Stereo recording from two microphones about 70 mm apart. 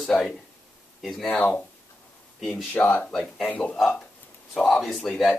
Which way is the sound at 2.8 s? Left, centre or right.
Left.